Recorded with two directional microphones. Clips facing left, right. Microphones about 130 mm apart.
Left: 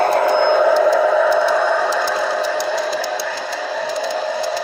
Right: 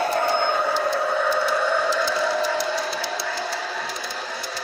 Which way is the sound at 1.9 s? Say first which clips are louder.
Left 4 dB; 90° left.